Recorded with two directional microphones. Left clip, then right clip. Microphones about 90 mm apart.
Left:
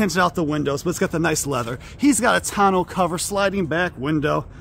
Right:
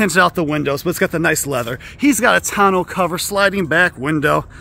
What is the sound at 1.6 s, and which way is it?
Speech, 35° right (ahead or behind).